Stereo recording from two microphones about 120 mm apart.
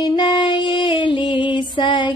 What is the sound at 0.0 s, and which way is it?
Female singing, 35° left (ahead or behind).